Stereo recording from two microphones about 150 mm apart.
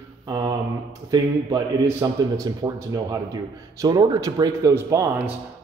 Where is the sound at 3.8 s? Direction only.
25° right (ahead or behind).